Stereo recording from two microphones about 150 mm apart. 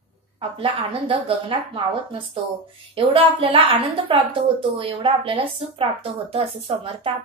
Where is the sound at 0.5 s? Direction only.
35° right (ahead or behind).